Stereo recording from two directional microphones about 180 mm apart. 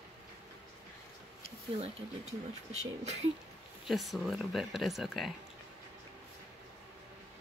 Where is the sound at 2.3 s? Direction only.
35° right (ahead or behind).